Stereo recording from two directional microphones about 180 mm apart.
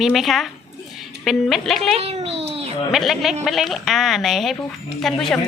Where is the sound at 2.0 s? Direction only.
35° right (ahead or behind).